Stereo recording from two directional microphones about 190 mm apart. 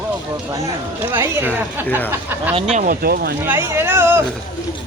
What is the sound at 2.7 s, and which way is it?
Speech, 45° right (ahead or behind).